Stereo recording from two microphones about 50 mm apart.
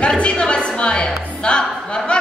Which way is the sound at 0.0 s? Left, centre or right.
Left.